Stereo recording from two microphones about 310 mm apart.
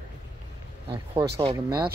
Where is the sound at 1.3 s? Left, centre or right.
Centre.